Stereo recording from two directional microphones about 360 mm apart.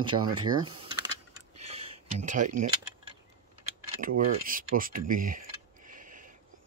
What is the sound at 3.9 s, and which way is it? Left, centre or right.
Speech, right.